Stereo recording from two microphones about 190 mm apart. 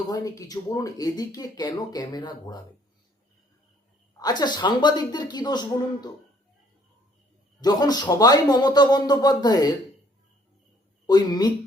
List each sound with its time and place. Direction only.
0.1 s speech: 20° left (ahead or behind)
4.2 s speech: 20° left (ahead or behind)
7.6 s speech: 20° left (ahead or behind)
11.0 s speech: 20° left (ahead or behind)